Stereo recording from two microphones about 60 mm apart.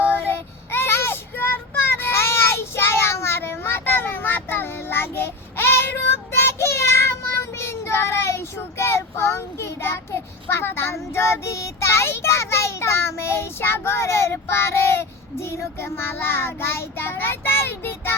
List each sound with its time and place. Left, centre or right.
0.0 s child singing: left